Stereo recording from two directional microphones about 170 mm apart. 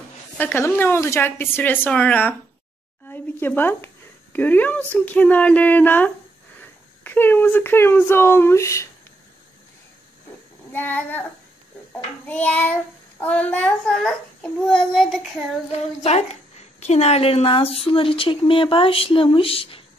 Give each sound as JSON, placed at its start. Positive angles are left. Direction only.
{"t": 0.4, "sound": "speech", "side_deg": 10}
{"t": 10.7, "sound": "speech", "side_deg": 10}
{"t": 12.3, "sound": "a child's voice", "side_deg": 10}
{"t": 16.0, "sound": "a woman's voice", "side_deg": 40}